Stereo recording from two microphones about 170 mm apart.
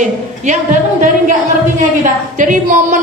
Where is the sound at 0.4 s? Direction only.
50° right (ahead or behind).